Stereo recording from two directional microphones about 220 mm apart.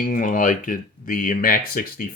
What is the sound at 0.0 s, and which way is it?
Speech, 40° left (ahead or behind).